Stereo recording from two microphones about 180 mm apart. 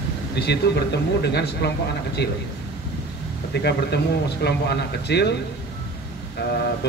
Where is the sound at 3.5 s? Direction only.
70° left (ahead or behind).